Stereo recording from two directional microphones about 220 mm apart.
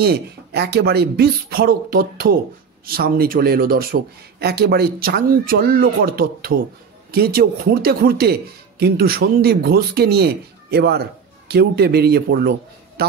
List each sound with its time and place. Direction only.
0.0 s speech: 45° right (ahead or behind)